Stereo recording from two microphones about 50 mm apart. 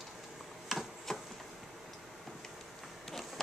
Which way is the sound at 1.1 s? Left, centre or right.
Centre.